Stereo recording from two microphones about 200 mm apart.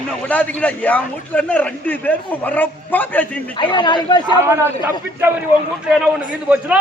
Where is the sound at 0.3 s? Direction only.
10° left (ahead or behind).